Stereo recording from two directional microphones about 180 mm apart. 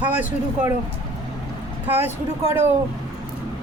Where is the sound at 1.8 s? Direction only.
10° right (ahead or behind).